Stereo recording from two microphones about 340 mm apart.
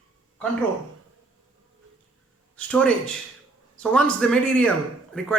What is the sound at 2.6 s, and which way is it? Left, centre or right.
Speech, centre.